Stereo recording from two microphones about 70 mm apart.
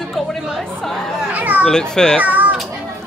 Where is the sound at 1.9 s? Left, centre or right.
Centre.